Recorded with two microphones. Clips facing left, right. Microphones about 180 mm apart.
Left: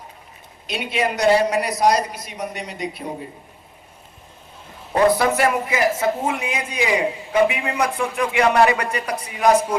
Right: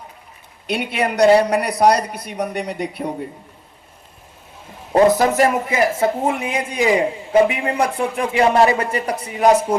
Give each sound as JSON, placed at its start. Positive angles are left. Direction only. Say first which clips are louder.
{"t": 0.7, "sound": "a woman's voice", "louder": "right 2 dB", "side_deg": -60}
{"t": 4.9, "sound": "speech", "louder": "right 3 dB", "side_deg": -40}
{"t": 6.4, "sound": "a man's voice", "louder": "right 4 dB", "side_deg": -50}
{"t": 7.3, "sound": "speech", "louder": "right 4 dB", "side_deg": -35}